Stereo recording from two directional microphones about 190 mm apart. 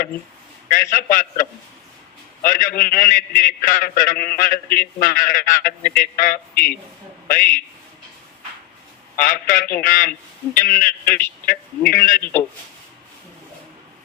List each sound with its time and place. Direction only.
0.7 s a man's voice: 45° left (ahead or behind)
9.1 s a man's voice: 45° left (ahead or behind)
12.2 s a man's voice: 10° left (ahead or behind)